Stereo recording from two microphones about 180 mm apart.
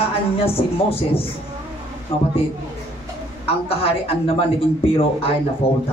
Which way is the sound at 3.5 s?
30° left (ahead or behind).